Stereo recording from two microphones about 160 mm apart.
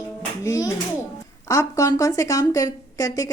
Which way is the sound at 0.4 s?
20° left (ahead or behind).